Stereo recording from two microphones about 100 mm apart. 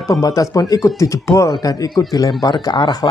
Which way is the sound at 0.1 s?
35° left (ahead or behind).